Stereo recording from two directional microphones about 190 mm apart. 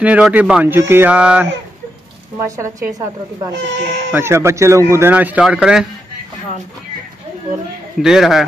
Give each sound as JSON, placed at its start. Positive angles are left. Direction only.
{"t": 0.0, "sound": "a man's voice", "side_deg": -5}
{"t": 3.5, "sound": "speech", "side_deg": -70}
{"t": 4.1, "sound": "a man's voice", "side_deg": -15}
{"t": 8.0, "sound": "a man's voice", "side_deg": 0}